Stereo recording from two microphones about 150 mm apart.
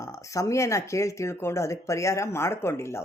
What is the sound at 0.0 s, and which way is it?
Speech, 20° left (ahead or behind).